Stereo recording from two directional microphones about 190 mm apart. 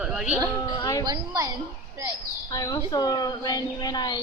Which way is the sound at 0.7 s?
20° left (ahead or behind).